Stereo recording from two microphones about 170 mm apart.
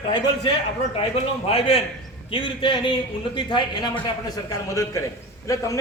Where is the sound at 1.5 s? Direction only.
35° left (ahead or behind).